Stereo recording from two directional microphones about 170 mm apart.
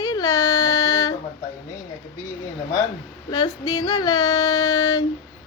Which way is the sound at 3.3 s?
25° left (ahead or behind).